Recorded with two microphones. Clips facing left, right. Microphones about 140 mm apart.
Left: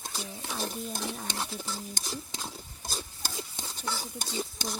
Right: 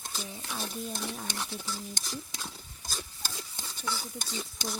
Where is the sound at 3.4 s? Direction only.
30° left (ahead or behind).